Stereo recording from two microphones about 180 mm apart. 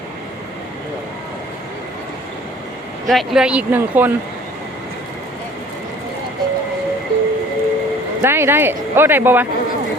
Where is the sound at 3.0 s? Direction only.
Centre (ahead or behind).